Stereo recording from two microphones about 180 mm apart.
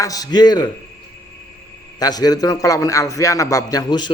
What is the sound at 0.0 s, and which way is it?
Speech, 20° left (ahead or behind).